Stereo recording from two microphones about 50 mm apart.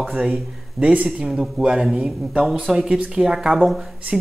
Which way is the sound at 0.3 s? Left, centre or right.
Right.